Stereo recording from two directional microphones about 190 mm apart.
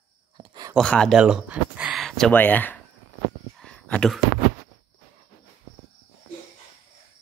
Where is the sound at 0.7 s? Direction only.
5° left (ahead or behind).